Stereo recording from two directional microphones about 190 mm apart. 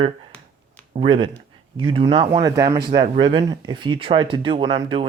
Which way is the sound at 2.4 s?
20° right (ahead or behind).